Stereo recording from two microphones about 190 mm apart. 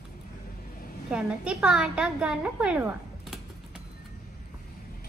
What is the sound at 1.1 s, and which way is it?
A woman's voice, 5° right (ahead or behind).